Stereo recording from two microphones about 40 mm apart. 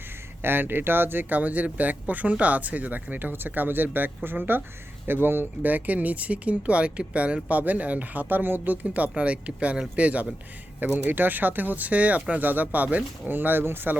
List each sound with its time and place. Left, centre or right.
0.4 s speech: right
5.6 s speech: right
11.0 s speech: right
12.3 s speech: right
13.3 s speech: right